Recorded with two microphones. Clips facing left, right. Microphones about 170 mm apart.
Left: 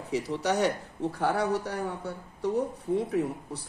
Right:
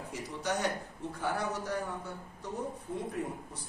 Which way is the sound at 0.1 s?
70° left (ahead or behind).